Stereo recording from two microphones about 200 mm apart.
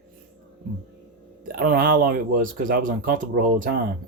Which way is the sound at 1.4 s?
45° right (ahead or behind).